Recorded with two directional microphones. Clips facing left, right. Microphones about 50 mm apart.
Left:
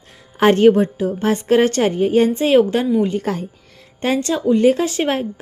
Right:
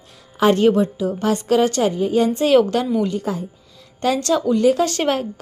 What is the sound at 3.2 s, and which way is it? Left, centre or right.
Speech, left.